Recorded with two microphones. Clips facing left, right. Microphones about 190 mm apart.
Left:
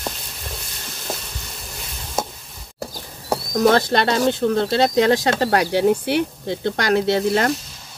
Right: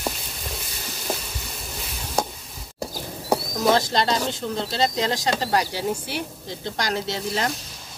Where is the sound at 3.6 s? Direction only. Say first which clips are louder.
Left 4 dB; 60° left (ahead or behind).